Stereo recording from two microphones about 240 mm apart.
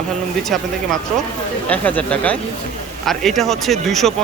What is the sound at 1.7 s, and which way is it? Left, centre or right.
Speech, centre.